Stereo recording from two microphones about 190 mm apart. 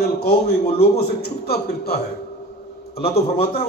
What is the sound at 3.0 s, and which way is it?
Speech, 55° left (ahead or behind).